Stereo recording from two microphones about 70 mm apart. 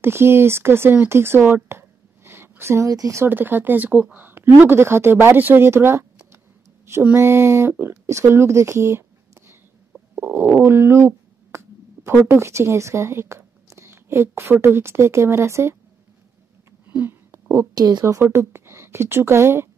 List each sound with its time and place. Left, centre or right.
0.0 s speech: right
2.9 s speech: right
3.3 s speech: right
7.2 s speech: right
10.1 s stomach rumble: right
10.6 s a sound: right
12.3 s speech: right
16.8 s a sound: right
17.7 s a woman's voice: right
18.0 s speech: right